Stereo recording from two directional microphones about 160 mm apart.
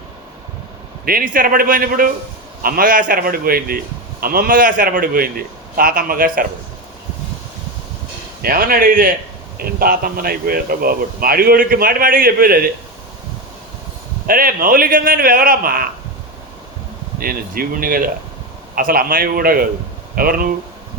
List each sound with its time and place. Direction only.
1.0 s a man's voice: 60° right (ahead or behind)
8.4 s a man's voice: 65° right (ahead or behind)
14.3 s a man's voice: 65° right (ahead or behind)
17.2 s a man's voice: 65° right (ahead or behind)